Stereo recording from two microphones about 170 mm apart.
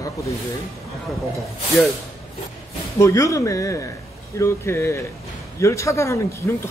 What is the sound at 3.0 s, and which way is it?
Speech, 15° left (ahead or behind).